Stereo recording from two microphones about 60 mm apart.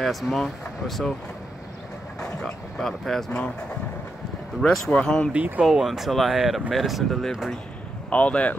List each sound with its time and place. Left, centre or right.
0.0 s speech: centre
2.4 s speech: centre
3.3 s speech: centre
4.6 s speech: centre
5.6 s speech: centre
8.1 s speech: left